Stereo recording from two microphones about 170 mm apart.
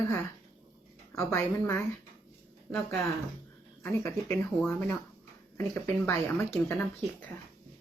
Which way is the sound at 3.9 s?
15° left (ahead or behind).